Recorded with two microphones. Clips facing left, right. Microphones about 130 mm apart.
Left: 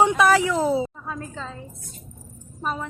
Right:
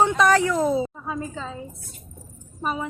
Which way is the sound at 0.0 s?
10° left (ahead or behind).